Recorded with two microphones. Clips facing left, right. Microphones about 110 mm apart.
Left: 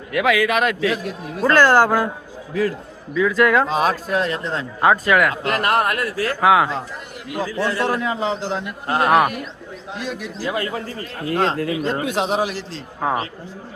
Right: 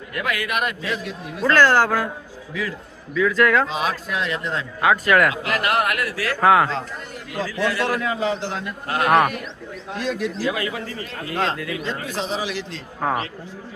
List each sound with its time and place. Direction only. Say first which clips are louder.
0.1 s a man's voice: left 8 dB; 90° left
1.0 s speech: left 2 dB; 45° left (ahead or behind)
1.5 s speech: left 3 dB; 15° left (ahead or behind)
2.5 s speech: left 7 dB; 40° left (ahead or behind)
3.2 s speech: left 2 dB; 15° left (ahead or behind)
3.7 s speech: left 5 dB; 45° left (ahead or behind)
5.3 s speech: left 3 dB; 40° left (ahead or behind)
6.4 s speech: even; 10° left (ahead or behind)
7.7 s a man's voice: left 2 dB; 25° left (ahead or behind)
8.9 s a man's voice: left 2 dB; 30° left (ahead or behind)
9.1 s a man's voice: even; 5° left (ahead or behind)
10.4 s speech: left 1 dB; 35° left (ahead or behind); by 12.5 s 65° left (ahead or behind)
12.5 s speech: even; 40° left (ahead or behind)
13.0 s speech: left 1 dB; 10° left (ahead or behind)